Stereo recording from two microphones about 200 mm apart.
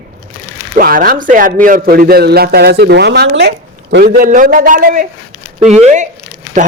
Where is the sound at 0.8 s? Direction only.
45° right (ahead or behind).